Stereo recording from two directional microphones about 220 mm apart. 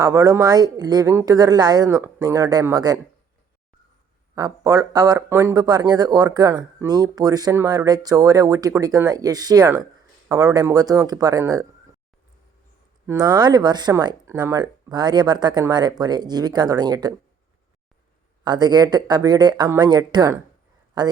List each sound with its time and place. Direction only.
0.0 s speech: 15° right (ahead or behind)
4.4 s speech: 15° right (ahead or behind)
13.1 s speech: 15° right (ahead or behind)
18.4 s speech: 20° right (ahead or behind)